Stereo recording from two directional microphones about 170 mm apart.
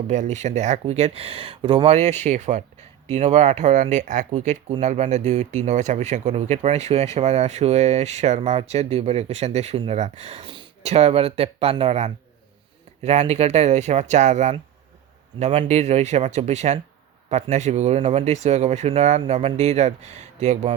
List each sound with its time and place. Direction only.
0.1 s speech: 45° right (ahead or behind)